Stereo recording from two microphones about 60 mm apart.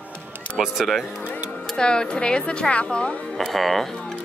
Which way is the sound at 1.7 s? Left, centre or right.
Centre.